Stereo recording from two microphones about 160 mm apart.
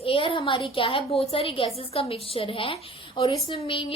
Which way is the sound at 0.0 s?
35° left (ahead or behind).